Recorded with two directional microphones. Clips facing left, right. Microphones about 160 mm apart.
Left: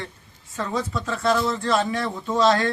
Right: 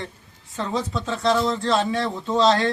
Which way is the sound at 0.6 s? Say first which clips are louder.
Right 1 dB; 20° right (ahead or behind).